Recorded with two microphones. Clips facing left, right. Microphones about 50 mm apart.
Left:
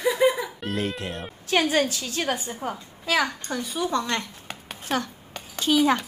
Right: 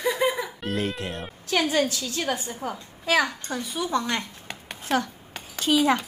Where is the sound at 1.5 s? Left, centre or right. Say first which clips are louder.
Left 1 dB; left.